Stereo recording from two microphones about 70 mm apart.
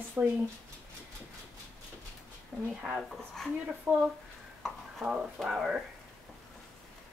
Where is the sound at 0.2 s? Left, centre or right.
Right.